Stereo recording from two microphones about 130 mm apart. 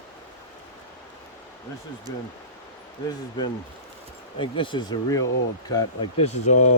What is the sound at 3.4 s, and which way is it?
Speech, 35° left (ahead or behind).